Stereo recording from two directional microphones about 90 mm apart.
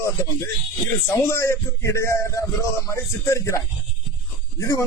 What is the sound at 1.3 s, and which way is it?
Speech, 30° left (ahead or behind).